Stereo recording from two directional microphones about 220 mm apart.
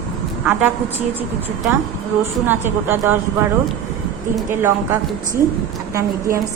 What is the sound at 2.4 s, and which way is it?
Speech, 10° right (ahead or behind).